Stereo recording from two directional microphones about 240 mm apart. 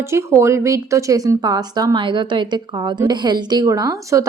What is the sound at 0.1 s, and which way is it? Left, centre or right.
A woman's voice, centre.